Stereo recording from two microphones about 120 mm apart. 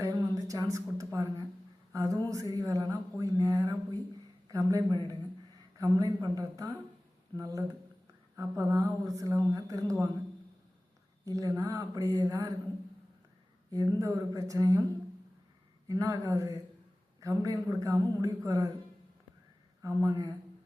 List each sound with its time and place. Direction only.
0.0 s speech: 25° right (ahead or behind)
11.3 s speech: 25° right (ahead or behind)
13.7 s speech: 30° right (ahead or behind)
15.9 s speech: 30° right (ahead or behind)
19.8 s speech: 25° right (ahead or behind)